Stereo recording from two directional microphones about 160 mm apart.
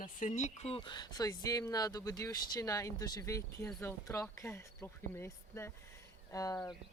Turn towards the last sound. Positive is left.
turn(degrees=20)  # may be behind; listen again after turning